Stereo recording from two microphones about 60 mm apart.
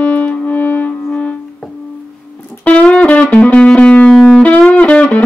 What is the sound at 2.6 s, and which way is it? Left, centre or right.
Music, left.